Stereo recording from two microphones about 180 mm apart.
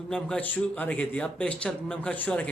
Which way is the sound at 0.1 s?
5° left (ahead or behind).